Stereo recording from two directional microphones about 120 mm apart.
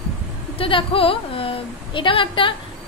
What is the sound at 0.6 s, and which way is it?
A woman's voice, 50° left (ahead or behind).